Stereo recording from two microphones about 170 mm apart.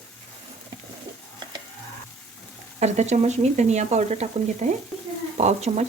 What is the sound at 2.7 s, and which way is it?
Speech, 40° right (ahead or behind).